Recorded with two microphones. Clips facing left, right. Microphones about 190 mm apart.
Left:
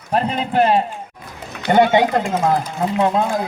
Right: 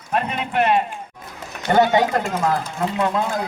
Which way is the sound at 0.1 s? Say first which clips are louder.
Left 4 dB; 35° left (ahead or behind).